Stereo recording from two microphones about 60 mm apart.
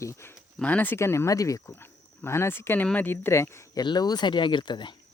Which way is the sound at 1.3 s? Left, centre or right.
Left.